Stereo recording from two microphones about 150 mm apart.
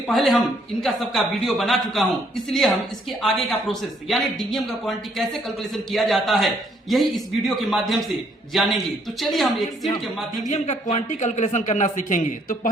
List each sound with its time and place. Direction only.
0.1 s speech: centre (ahead or behind)
10.5 s speech: 50° left (ahead or behind)